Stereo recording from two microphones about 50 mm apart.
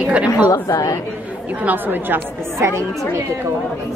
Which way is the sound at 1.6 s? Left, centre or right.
Right.